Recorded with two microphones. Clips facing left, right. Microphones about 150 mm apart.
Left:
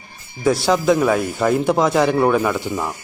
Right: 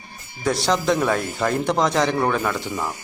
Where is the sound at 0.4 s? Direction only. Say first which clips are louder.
Left 5 dB; 5° left (ahead or behind).